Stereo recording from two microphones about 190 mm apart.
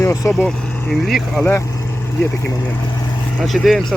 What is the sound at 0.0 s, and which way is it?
Speech, 15° left (ahead or behind).